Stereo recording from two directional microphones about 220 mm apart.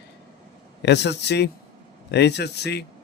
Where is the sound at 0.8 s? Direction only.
50° left (ahead or behind).